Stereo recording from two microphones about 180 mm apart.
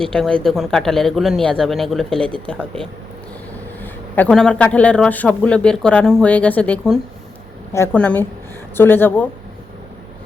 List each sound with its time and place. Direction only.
0.0 s a man's voice: 5° left (ahead or behind)